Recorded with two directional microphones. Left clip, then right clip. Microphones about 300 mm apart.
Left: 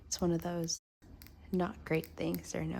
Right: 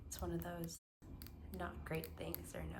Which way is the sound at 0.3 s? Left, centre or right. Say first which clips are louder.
Left 10 dB; centre.